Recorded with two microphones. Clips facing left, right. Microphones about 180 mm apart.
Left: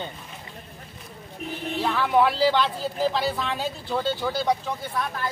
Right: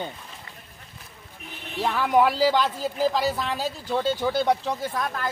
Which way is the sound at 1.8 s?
10° right (ahead or behind).